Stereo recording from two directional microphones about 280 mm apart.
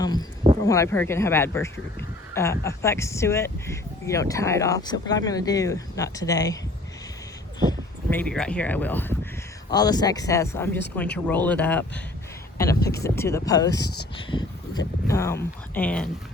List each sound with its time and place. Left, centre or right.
0.0 s a sound: centre
0.7 s speech: centre
7.7 s speech: centre
13.7 s speech: left
14.2 s speech: centre